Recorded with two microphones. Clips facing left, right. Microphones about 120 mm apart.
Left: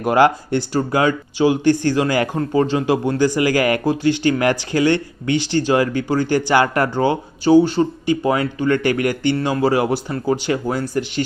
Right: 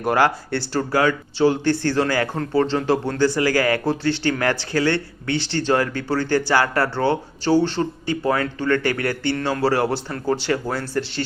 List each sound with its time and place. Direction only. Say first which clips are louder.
0.0 s speech: left 4 dB; 20° left (ahead or behind)